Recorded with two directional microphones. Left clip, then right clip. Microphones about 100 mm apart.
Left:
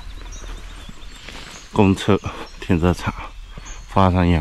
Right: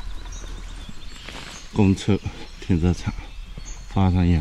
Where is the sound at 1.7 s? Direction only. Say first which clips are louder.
Left 6 dB; 35° right (ahead or behind).